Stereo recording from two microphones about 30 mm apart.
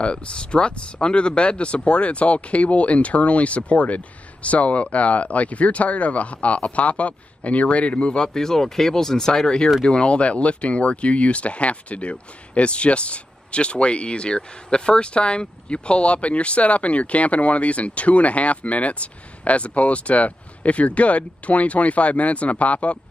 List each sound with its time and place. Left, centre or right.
0.0 s speech: left
8.2 s speech: centre
9.8 s speech: left